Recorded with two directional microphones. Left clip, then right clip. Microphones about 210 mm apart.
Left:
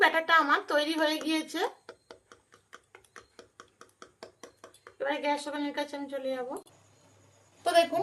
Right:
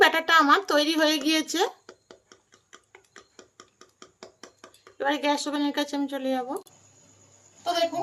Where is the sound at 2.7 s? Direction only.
5° left (ahead or behind).